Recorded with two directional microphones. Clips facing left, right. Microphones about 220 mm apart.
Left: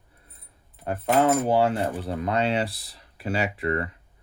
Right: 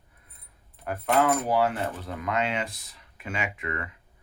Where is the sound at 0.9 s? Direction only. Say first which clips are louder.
Left 3 dB; 30° left (ahead or behind).